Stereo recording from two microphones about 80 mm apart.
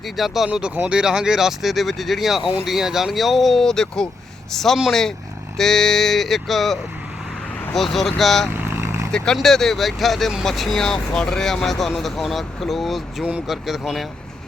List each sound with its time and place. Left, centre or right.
0.0 s speech: centre
0.4 s speech: centre
8.6 s vehicle: right
9.1 s speech: centre